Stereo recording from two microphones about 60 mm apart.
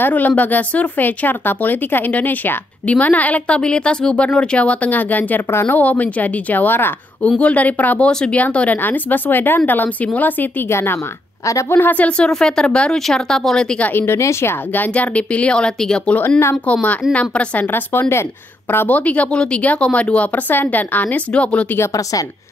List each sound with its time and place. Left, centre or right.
0.0 s speech: left
7.2 s speech: centre
8.1 s speech: centre
8.4 s a woman's voice: left
10.7 s speech: left
11.7 s a woman's voice: left
12.2 s speech: centre
13.9 s speech: left
14.7 s speech: left
17.7 s a woman's voice: left
18.9 s speech: left